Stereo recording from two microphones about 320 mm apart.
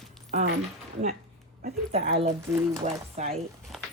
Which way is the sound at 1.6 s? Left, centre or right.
Right.